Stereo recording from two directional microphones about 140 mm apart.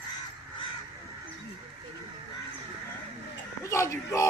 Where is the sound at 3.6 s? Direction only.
20° left (ahead or behind).